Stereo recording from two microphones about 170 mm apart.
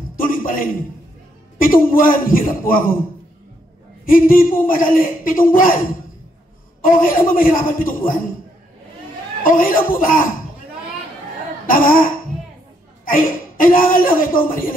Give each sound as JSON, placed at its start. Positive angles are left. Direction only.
{"t": 0.2, "sound": "a sound", "side_deg": 55}
{"t": 1.6, "sound": "speech", "side_deg": 55}
{"t": 4.0, "sound": "speech", "side_deg": 55}
{"t": 9.4, "sound": "speech", "side_deg": 55}
{"t": 11.6, "sound": "speech", "side_deg": 55}
{"t": 13.6, "sound": "speech", "side_deg": 55}